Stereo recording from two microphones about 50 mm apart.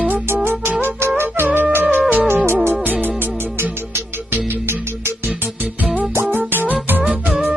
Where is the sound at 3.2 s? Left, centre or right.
Right.